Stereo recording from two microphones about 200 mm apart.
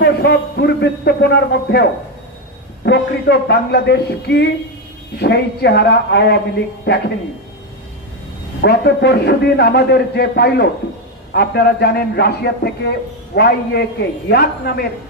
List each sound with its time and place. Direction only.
0.0 s a man's voice: 55° left (ahead or behind)
8.6 s a man's voice: 55° left (ahead or behind)